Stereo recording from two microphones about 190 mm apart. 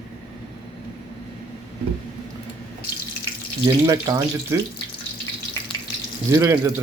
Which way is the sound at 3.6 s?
15° right (ahead or behind).